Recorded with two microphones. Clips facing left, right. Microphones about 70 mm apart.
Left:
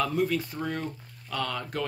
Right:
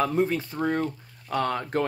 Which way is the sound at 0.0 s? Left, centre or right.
Right.